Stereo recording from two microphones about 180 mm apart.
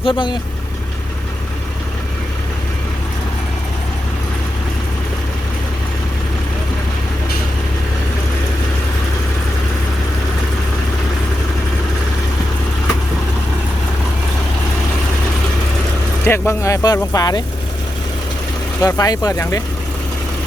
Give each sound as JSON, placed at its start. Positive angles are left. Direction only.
{"t": 0.0, "sound": "speech", "side_deg": 25}
{"t": 16.2, "sound": "speech", "side_deg": 15}
{"t": 18.8, "sound": "speech", "side_deg": 20}